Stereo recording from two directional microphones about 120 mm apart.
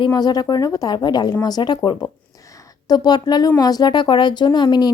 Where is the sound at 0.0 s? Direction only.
35° left (ahead or behind).